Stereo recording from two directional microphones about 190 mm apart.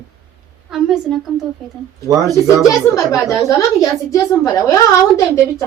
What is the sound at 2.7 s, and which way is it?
A woman's voice, 15° left (ahead or behind).